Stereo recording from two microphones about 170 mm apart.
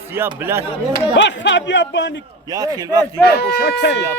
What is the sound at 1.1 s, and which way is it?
Speech, 90° left.